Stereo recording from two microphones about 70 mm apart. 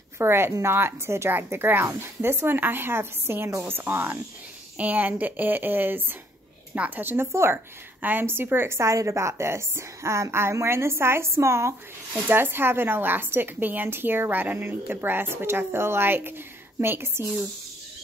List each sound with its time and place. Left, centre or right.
0.2 s a woman's voice: right